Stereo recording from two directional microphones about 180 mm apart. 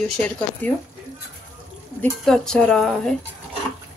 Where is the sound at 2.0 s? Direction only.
5° left (ahead or behind).